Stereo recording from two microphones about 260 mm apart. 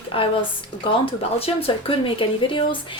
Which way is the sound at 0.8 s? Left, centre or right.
Left.